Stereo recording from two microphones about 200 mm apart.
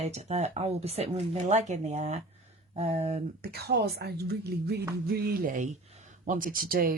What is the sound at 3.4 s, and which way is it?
A woman's voice, 50° right (ahead or behind).